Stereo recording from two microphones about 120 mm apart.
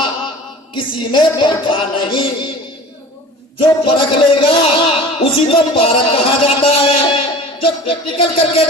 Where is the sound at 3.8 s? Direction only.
45° left (ahead or behind).